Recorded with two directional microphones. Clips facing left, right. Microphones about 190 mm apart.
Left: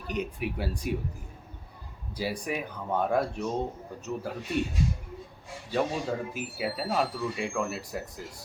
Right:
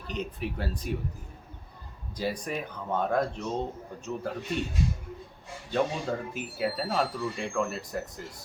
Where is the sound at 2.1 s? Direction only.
10° left (ahead or behind).